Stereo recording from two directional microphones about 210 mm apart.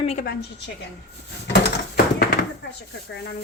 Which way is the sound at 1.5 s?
50° left (ahead or behind).